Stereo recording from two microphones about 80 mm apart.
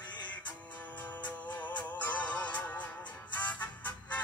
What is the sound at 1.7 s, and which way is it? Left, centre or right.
Music, centre.